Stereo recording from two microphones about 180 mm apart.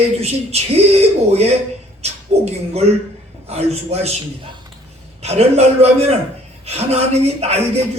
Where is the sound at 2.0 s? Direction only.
35° right (ahead or behind).